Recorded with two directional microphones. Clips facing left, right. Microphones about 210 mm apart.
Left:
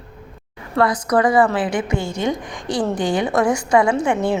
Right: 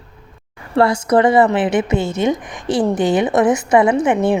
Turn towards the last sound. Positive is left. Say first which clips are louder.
# right 4 dB
turn(degrees=-20)  # may be behind; listen again after turning